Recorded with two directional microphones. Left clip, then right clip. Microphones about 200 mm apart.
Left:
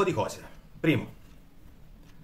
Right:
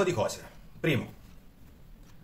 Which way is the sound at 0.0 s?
15° left (ahead or behind).